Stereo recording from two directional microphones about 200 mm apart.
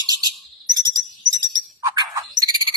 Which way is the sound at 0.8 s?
20° right (ahead or behind).